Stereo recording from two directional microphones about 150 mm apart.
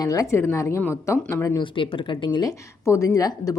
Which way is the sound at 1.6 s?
35° left (ahead or behind).